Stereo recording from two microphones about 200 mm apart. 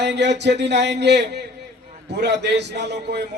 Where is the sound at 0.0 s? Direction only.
60° right (ahead or behind).